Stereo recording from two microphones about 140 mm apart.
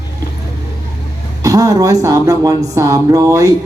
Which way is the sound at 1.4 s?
25° right (ahead or behind).